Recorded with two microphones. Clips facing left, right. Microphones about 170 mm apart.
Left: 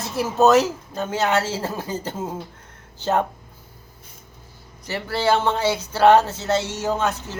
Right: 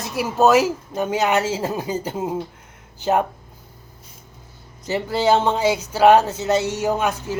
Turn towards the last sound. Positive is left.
turn(degrees=-10)  # may be behind; listen again after turning